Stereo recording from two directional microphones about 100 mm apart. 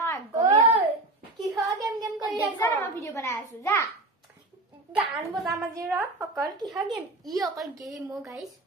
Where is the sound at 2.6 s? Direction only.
30° left (ahead or behind).